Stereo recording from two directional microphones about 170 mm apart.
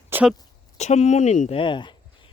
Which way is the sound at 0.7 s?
40° left (ahead or behind).